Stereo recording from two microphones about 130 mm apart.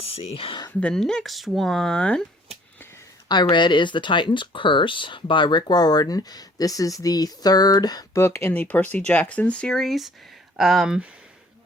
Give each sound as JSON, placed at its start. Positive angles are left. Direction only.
{"t": 0.0, "sound": "speech", "side_deg": 45}
{"t": 0.7, "sound": "speech", "side_deg": 10}
{"t": 3.2, "sound": "speech", "side_deg": 35}